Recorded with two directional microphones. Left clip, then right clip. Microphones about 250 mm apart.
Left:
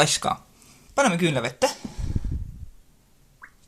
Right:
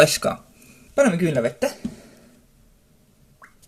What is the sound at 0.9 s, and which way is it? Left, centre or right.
Speech, left.